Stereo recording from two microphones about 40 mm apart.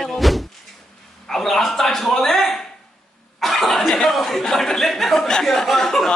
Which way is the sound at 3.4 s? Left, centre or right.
Centre.